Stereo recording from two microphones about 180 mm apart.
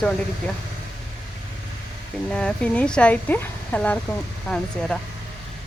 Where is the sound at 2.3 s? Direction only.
5° left (ahead or behind).